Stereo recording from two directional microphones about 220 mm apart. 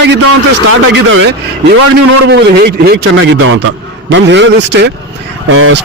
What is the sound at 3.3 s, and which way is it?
A man's voice, 65° right (ahead or behind).